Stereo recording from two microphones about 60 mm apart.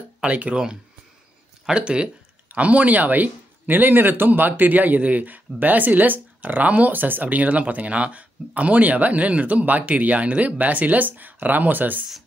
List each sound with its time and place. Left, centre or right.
0.2 s speech: right